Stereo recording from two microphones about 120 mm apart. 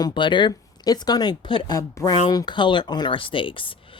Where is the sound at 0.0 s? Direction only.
40° left (ahead or behind).